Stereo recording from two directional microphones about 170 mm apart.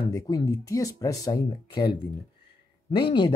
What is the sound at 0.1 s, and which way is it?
Speech, 20° left (ahead or behind).